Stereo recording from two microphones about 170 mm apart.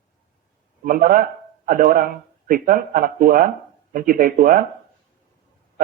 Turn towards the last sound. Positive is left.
turn(degrees=-55)  # may be behind; listen again after turning